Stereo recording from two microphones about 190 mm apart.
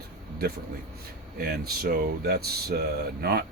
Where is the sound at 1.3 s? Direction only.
50° right (ahead or behind).